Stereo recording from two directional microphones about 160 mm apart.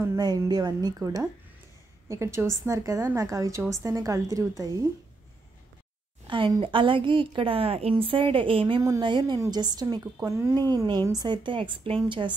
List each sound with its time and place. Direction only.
0.0 s a woman's voice: 20° right (ahead or behind)
6.2 s a woman's voice: 30° right (ahead or behind)